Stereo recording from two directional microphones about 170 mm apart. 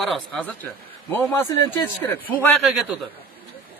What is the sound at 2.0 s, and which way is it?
Speech, 15° left (ahead or behind).